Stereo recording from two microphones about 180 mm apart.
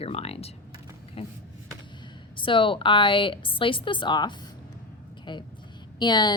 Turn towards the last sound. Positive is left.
turn(degrees=25)  # may be behind; listen again after turning